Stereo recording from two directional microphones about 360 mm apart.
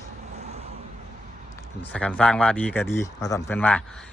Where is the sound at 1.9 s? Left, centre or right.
Centre.